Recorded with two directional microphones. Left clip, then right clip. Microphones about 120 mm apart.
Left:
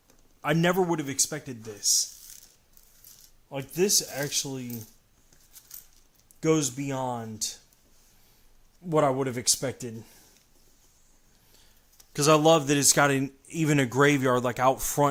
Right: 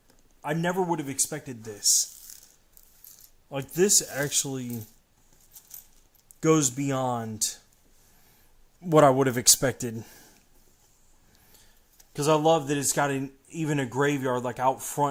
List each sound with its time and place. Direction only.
0.4 s a man's voice: 50° left (ahead or behind)
0.9 s speech: 10° left (ahead or behind)
1.1 s speech: centre (ahead or behind)
1.7 s speech: 35° right (ahead or behind)
3.5 s speech: 30° right (ahead or behind)
6.4 s speech: 35° right (ahead or behind)
8.9 s speech: 40° right (ahead or behind)
12.1 s speech: 20° left (ahead or behind)